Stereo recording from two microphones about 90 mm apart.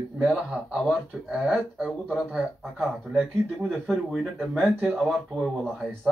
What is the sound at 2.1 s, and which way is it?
Speech, 10° right (ahead or behind).